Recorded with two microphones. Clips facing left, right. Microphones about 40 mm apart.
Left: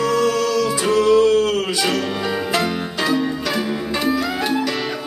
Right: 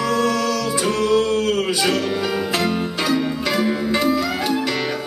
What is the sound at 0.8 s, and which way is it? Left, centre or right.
Music, left.